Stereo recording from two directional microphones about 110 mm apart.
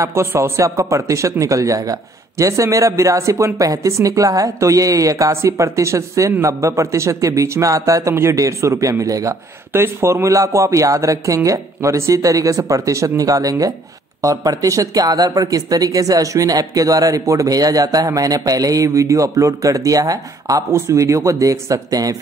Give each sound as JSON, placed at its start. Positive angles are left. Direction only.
{"t": 0.0, "sound": "speech", "side_deg": -25}